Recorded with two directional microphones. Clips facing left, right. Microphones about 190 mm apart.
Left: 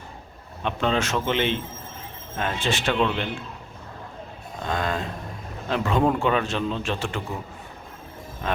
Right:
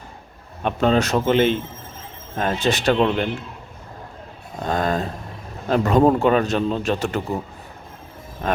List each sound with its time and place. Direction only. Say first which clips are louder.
0.6 s a man's voice: right 6 dB; 40° right (ahead or behind)
4.6 s a man's voice: right 5 dB; 40° right (ahead or behind)